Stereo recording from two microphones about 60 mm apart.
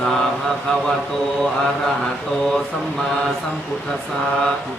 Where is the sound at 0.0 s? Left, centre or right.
Centre.